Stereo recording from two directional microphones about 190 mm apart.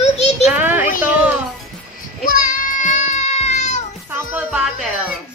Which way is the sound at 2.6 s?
45° left (ahead or behind).